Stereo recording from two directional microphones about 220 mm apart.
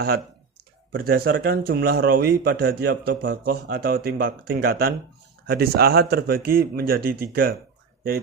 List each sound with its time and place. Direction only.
0.0 s speech: 45° right (ahead or behind)